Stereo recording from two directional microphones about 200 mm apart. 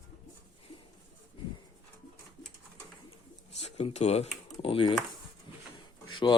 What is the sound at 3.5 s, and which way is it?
Speech, 30° left (ahead or behind).